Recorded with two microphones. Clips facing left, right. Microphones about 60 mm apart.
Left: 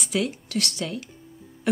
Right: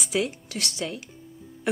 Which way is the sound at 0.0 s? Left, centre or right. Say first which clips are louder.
Even; centre.